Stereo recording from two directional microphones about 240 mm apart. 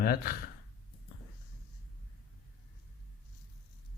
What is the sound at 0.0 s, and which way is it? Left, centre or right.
Speech, left.